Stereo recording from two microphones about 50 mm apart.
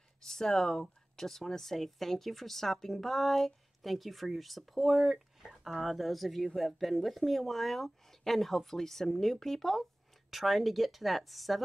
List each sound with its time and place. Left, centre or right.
0.2 s speech: centre